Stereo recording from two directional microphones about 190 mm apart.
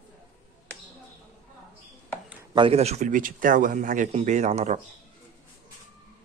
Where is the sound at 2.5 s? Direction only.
30° right (ahead or behind).